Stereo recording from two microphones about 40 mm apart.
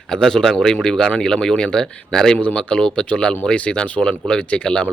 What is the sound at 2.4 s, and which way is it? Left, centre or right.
Speech, left.